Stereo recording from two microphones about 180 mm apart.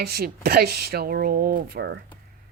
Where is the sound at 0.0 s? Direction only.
60° right (ahead or behind).